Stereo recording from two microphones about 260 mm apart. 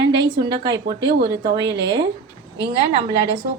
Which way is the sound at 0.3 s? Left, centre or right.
Centre.